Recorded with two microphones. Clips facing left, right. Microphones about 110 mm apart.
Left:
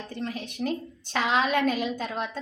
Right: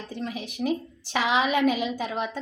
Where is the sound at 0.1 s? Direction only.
5° right (ahead or behind).